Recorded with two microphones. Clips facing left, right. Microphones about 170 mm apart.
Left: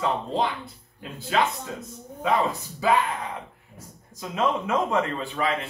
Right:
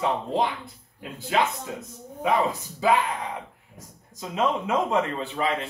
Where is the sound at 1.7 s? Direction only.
15° right (ahead or behind).